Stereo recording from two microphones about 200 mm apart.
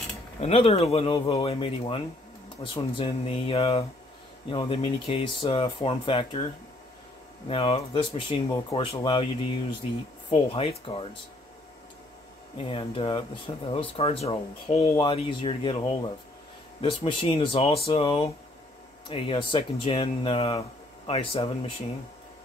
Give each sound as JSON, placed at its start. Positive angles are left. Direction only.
{"t": 0.4, "sound": "speech", "side_deg": 30}
{"t": 7.4, "sound": "speech", "side_deg": 30}
{"t": 10.3, "sound": "speech", "side_deg": 30}
{"t": 12.6, "sound": "speech", "side_deg": 30}